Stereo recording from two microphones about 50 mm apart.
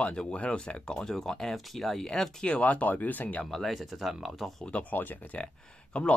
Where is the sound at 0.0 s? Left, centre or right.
Left.